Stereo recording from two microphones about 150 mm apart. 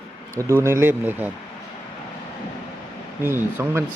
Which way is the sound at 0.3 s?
20° right (ahead or behind).